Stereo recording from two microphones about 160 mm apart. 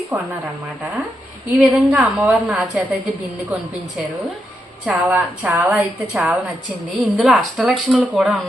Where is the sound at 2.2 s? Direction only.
5° right (ahead or behind).